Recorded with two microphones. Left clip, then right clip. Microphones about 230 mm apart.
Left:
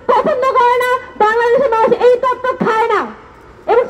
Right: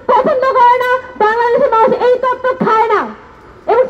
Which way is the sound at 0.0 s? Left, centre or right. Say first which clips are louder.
Right 2 dB; left.